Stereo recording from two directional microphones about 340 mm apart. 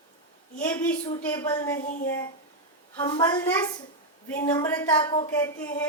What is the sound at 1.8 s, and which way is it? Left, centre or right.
Speech, left.